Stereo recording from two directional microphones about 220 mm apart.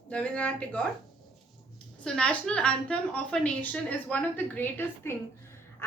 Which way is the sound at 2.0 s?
5° left (ahead or behind).